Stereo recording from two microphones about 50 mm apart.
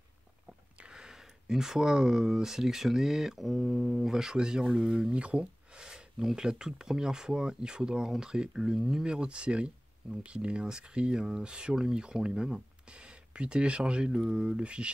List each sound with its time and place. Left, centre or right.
0.7 s speech: centre
8.7 s speech: centre
9.0 s speech: centre